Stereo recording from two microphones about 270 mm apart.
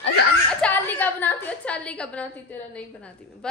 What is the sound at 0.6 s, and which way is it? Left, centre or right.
A woman's voice, centre.